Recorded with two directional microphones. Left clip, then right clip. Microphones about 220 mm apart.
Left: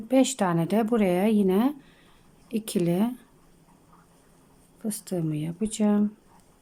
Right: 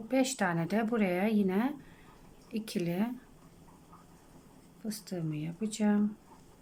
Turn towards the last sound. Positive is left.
turn(degrees=15)  # may be behind; listen again after turning